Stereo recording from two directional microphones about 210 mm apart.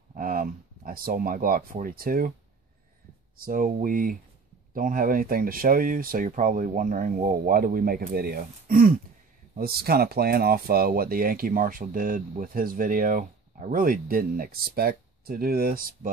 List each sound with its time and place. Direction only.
0.1 s speech: 40° right (ahead or behind)
3.3 s speech: 40° right (ahead or behind)